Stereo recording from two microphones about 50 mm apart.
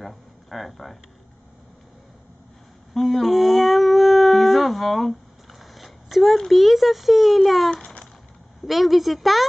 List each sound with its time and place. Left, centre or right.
0.0 s speech: centre
2.9 s dog: centre
7.7 s a sound: centre
8.6 s a woman's voice: centre